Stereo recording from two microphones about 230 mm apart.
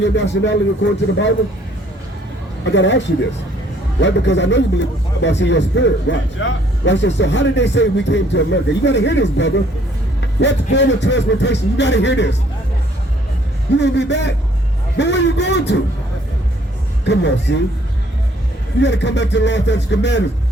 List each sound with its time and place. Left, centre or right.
0.0 s a man's voice: left
2.7 s a man's voice: left
4.0 s a man's voice: left
13.7 s a man's voice: left
17.1 s a man's voice: left
18.8 s a man's voice: left